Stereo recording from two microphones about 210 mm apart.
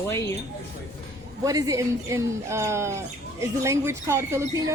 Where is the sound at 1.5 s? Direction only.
15° right (ahead or behind).